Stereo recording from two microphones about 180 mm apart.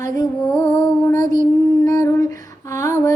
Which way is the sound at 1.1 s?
45° right (ahead or behind).